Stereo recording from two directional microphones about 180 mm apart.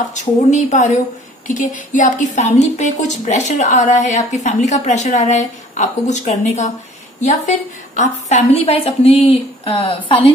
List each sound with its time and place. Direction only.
0.0 s a woman's voice: 40° left (ahead or behind)
8.6 s a woman's voice: 30° left (ahead or behind)